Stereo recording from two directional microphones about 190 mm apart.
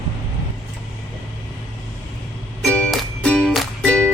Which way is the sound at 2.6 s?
5° left (ahead or behind).